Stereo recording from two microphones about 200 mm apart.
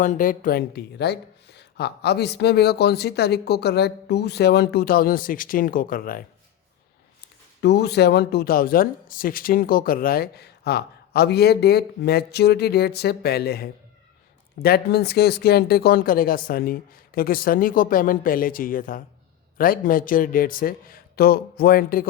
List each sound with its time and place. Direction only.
0.0 s speech: 40° left (ahead or behind)
7.6 s speech: 55° left (ahead or behind)